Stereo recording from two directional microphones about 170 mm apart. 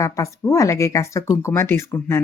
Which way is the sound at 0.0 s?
20° left (ahead or behind).